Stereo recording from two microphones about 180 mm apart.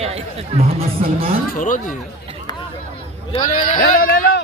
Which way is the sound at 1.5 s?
50° left (ahead or behind).